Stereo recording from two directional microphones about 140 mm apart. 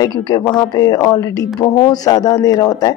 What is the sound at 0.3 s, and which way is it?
Speech, 30° left (ahead or behind).